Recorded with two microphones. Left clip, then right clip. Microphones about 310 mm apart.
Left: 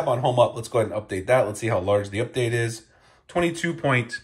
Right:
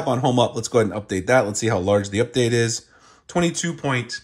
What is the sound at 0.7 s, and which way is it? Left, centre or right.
Speech, right.